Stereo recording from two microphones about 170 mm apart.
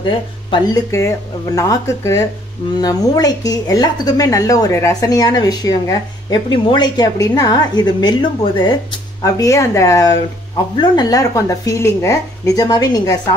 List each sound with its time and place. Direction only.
0.0 s speech: 25° left (ahead or behind)